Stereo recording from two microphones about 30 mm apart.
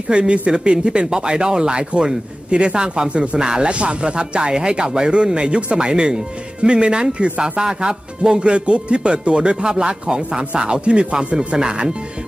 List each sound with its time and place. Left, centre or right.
0.1 s speech: right
3.6 s speech: right
11.3 s speech: right